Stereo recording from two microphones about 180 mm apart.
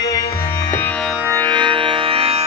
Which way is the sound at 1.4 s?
25° right (ahead or behind).